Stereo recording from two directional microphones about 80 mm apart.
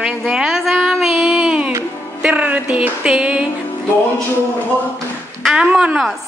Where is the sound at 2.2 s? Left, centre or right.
Centre.